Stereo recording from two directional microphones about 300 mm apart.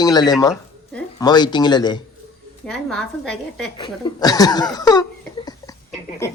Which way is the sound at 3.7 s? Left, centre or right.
Centre.